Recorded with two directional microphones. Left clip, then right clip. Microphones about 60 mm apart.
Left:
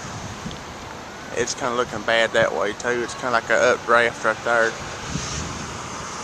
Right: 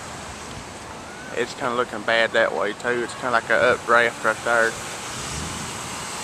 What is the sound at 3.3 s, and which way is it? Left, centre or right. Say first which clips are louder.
Speech: even; left.